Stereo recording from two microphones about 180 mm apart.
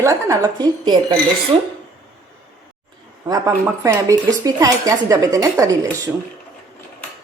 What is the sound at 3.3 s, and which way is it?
Speech, 15° right (ahead or behind).